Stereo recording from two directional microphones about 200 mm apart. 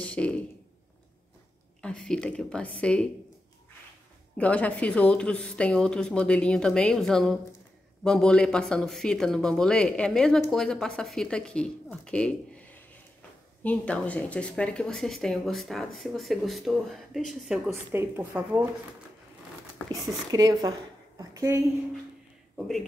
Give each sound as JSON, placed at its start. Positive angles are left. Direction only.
{"t": 0.0, "sound": "a sound", "side_deg": 5}
{"t": 1.8, "sound": "speech", "side_deg": 5}
{"t": 4.4, "sound": "speech", "side_deg": 5}
{"t": 17.9, "sound": "speech", "side_deg": -10}
{"t": 20.2, "sound": "a woman's voice", "side_deg": -20}